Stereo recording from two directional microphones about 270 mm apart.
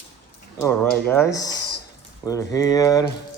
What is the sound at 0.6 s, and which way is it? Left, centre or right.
Speech, centre.